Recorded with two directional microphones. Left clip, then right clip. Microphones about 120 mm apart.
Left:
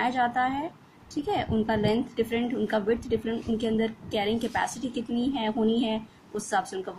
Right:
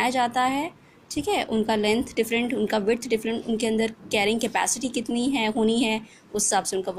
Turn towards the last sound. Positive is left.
turn(degrees=-15)  # may be behind; listen again after turning